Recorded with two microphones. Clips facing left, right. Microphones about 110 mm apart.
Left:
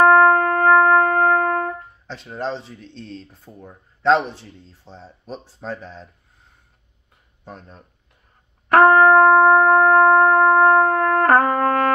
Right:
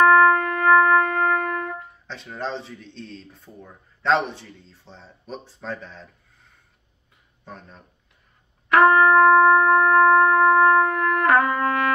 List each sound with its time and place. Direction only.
0.0 s music: 40° left (ahead or behind)
7.4 s speech: 40° left (ahead or behind)
8.6 s shofar: 45° left (ahead or behind)